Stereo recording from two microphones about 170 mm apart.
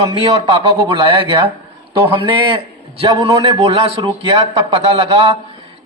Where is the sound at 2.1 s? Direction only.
30° right (ahead or behind).